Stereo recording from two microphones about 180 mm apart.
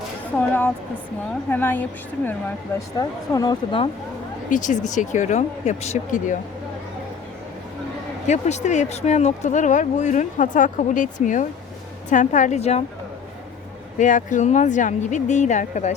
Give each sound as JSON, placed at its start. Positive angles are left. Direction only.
{"t": 0.3, "sound": "a woman's voice", "side_deg": 10}
{"t": 4.4, "sound": "speech", "side_deg": 45}
{"t": 8.3, "sound": "a woman's voice", "side_deg": 40}
{"t": 14.0, "sound": "speech", "side_deg": 45}